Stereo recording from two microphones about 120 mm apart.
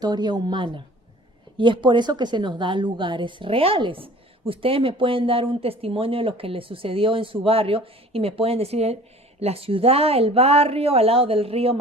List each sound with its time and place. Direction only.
0.0 s a woman's voice: 35° right (ahead or behind); by 11.8 s 55° right (ahead or behind)